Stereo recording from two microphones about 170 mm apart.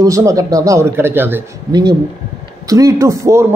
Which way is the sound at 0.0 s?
20° right (ahead or behind).